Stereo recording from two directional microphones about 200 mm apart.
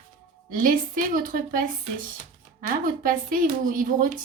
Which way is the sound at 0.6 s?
40° right (ahead or behind).